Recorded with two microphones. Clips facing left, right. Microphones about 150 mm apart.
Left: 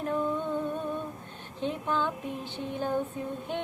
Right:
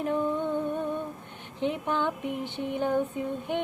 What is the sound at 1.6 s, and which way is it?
Music, 15° right (ahead or behind).